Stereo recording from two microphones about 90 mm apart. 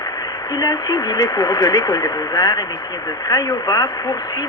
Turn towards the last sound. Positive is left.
turn(degrees=45)  # may be behind; listen again after turning